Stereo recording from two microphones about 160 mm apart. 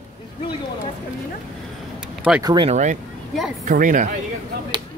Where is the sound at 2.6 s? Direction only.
50° right (ahead or behind).